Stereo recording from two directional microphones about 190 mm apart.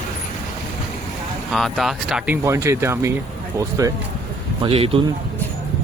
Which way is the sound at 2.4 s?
15° right (ahead or behind).